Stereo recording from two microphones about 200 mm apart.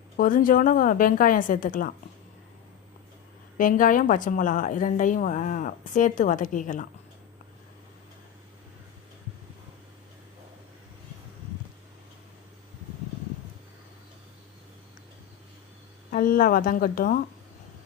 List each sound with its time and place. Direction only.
0.2 s a woman's voice: 45° left (ahead or behind)
3.6 s a woman's voice: 40° left (ahead or behind)
16.1 s a woman's voice: 45° left (ahead or behind)